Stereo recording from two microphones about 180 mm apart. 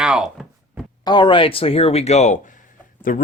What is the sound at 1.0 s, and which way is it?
Speech, 25° left (ahead or behind).